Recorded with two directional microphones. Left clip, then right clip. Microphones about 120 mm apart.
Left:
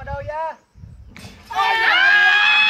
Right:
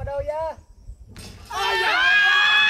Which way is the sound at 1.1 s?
30° right (ahead or behind).